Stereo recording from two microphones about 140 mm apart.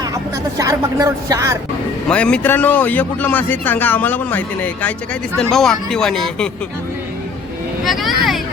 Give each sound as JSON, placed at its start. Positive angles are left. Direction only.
{"t": 0.6, "sound": "speech", "side_deg": -25}
{"t": 2.0, "sound": "a man's voice", "side_deg": 5}
{"t": 7.9, "sound": "speech", "side_deg": 0}